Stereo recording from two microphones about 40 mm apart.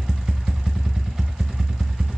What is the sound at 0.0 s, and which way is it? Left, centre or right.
Vehicle, centre.